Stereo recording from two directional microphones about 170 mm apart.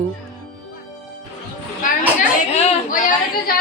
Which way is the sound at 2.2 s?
50° left (ahead or behind).